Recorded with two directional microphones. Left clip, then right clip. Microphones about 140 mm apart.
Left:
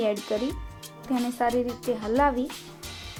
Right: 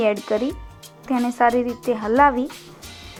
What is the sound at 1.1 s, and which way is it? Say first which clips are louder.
A woman's voice: right 7 dB; 15° right (ahead or behind).